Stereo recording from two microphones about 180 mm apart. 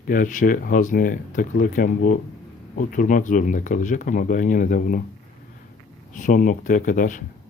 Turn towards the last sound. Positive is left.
turn(degrees=45)  # may be behind; listen again after turning